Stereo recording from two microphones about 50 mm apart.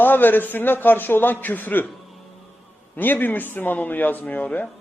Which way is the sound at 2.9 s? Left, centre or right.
Left.